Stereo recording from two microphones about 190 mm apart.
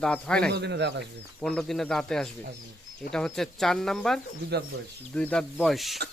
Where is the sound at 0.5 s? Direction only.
65° right (ahead or behind).